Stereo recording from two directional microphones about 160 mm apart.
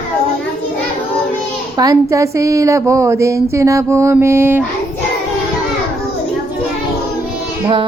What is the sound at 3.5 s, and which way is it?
Mantra, 20° right (ahead or behind).